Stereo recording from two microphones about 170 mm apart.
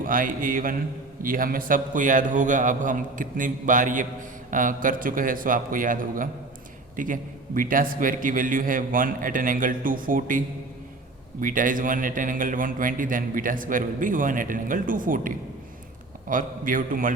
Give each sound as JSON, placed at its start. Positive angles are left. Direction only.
{"t": 0.0, "sound": "a man's voice", "side_deg": -55}
{"t": 16.3, "sound": "a man's voice", "side_deg": -50}